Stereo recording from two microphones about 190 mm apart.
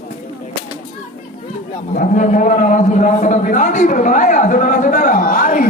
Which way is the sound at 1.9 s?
45° left (ahead or behind).